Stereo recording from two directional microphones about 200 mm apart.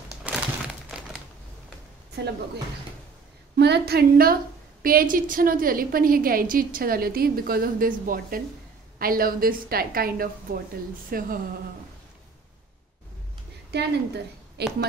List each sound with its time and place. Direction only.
0.3 s crumpling: 5° right (ahead or behind)
3.5 s a woman's voice: 55° right (ahead or behind)
13.7 s a woman's voice: 55° right (ahead or behind)